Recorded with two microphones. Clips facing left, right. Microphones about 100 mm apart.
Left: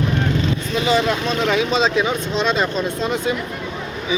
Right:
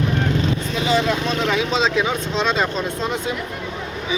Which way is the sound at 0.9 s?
70° left (ahead or behind).